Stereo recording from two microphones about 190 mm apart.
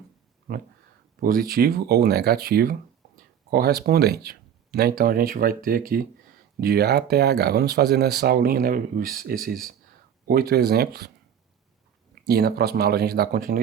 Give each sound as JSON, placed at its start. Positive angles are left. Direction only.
{"t": 1.2, "sound": "speech", "side_deg": -50}
{"t": 12.2, "sound": "speech", "side_deg": -55}